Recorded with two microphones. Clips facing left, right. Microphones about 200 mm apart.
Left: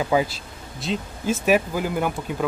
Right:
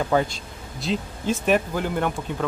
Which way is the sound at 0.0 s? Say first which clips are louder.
Even; 5° left (ahead or behind).